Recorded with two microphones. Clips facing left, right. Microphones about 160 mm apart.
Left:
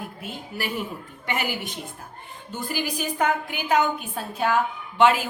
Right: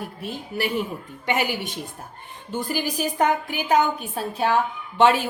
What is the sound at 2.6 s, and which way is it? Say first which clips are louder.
A woman's voice: right 3 dB; 40° right (ahead or behind).